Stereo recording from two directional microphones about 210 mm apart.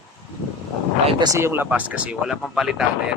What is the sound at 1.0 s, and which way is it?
Speech, 15° right (ahead or behind).